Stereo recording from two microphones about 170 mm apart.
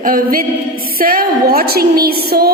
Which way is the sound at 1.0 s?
60° right (ahead or behind).